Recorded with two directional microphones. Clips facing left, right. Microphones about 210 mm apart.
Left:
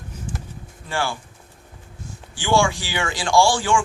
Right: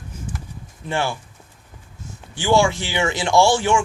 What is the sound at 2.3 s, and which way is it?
Speech, 20° right (ahead or behind).